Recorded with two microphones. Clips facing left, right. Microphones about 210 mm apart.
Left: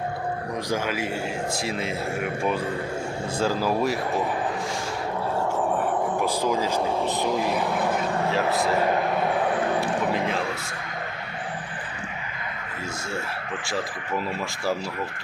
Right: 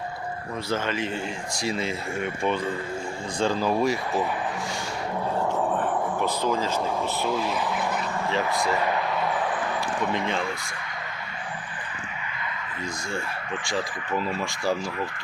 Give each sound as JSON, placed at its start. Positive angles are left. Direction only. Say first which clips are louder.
{"t": 0.7, "sound": "speech", "louder": "even", "side_deg": 10}
{"t": 6.2, "sound": "speech", "louder": "left 1 dB", "side_deg": 10}
{"t": 8.9, "sound": "vehicle", "louder": "left 3 dB", "side_deg": 50}
{"t": 10.1, "sound": "speech", "louder": "left 2 dB", "side_deg": 5}